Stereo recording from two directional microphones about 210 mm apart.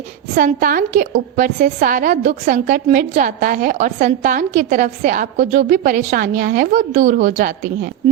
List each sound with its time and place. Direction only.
0.3 s a woman's voice: 40° right (ahead or behind)